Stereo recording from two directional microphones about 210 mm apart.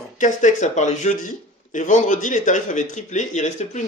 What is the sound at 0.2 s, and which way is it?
Speech, 35° left (ahead or behind).